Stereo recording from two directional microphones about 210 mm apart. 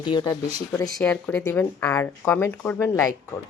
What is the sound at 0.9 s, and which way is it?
Speech, 5° left (ahead or behind).